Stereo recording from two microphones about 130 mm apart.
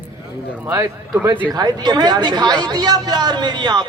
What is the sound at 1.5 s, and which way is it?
Speech, 30° right (ahead or behind).